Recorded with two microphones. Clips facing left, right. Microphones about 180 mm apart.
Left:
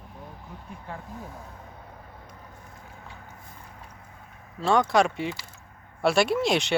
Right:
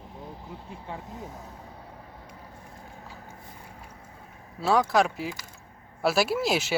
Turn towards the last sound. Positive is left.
turn(degrees=-5)  # may be behind; listen again after turning